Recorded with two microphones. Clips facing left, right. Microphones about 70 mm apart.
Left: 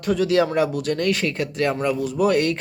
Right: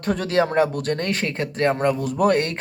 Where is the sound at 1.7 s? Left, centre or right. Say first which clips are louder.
Right 1 dB; right.